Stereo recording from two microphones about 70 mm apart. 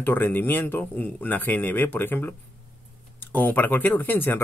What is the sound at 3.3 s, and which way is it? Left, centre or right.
Speech, left.